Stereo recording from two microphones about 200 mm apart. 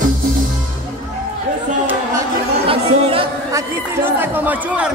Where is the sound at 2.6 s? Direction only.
30° right (ahead or behind).